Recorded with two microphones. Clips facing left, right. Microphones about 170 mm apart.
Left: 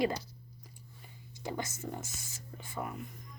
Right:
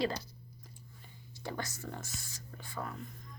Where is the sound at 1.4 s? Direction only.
20° left (ahead or behind).